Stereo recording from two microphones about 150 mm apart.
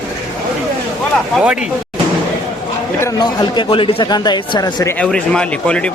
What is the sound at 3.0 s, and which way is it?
Speech, 25° left (ahead or behind).